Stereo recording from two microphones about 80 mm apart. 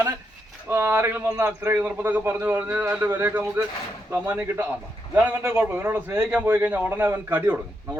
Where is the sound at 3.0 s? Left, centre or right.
Right.